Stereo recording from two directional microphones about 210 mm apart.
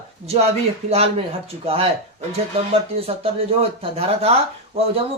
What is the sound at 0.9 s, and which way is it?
Speech, 30° right (ahead or behind).